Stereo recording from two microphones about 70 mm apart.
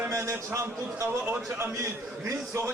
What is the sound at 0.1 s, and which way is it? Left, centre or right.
A man's voice, right.